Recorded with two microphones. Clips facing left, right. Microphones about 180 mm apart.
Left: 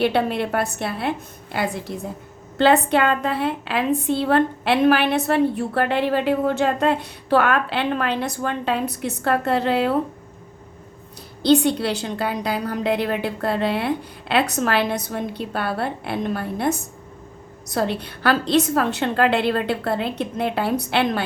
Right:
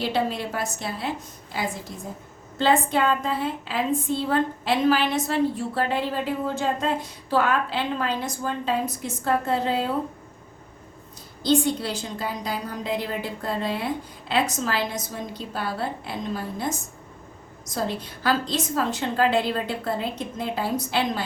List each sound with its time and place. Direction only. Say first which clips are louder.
0.0 s a woman's voice: left 5 dB; 60° left (ahead or behind)
11.4 s a woman's voice: left 5 dB; 70° left (ahead or behind)